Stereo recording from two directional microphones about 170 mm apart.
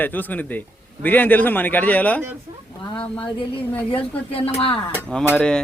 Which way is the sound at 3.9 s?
35° left (ahead or behind).